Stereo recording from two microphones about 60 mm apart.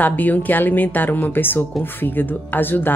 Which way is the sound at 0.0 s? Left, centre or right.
Left.